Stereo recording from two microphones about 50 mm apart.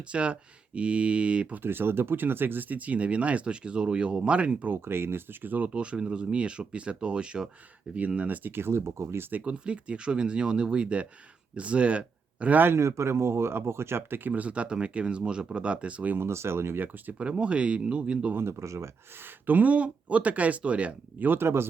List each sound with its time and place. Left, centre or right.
0.1 s speech: right
1.6 s speech: right
4.7 s speech: right
8.4 s speech: right
9.4 s speech: right
12.7 s speech: right
14.3 s speech: right
16.1 s speech: right
17.2 s speech: right
18.3 s speech: right
19.2 s speech: right
21.2 s speech: right
21.4 s speech: right